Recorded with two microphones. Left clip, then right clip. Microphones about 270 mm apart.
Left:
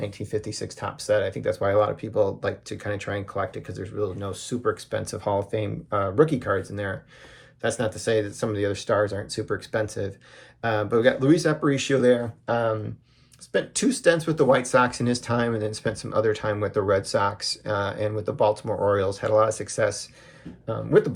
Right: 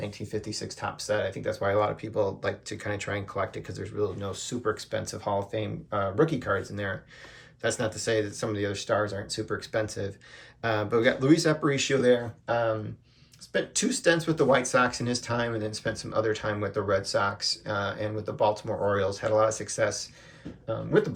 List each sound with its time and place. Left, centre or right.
0.0 s speech: centre